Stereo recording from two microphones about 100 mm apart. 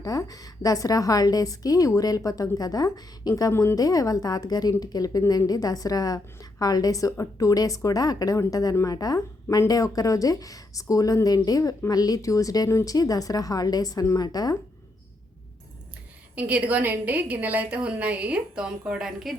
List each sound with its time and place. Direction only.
0.0 s a woman's voice: 35° left (ahead or behind)
3.5 s a woman's voice: 25° left (ahead or behind)
3.8 s a woman's voice: 35° left (ahead or behind)
16.3 s a woman's voice: 15° right (ahead or behind)